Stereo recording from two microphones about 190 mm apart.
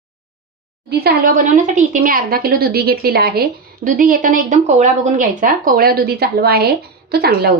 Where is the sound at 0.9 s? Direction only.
55° right (ahead or behind).